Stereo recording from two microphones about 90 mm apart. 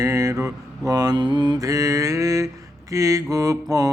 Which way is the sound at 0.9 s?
45° right (ahead or behind).